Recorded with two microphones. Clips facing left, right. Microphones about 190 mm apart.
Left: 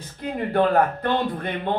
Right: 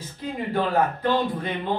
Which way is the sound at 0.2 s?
60° left (ahead or behind).